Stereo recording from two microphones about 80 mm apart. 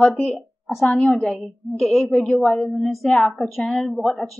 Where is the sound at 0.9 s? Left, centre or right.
Centre.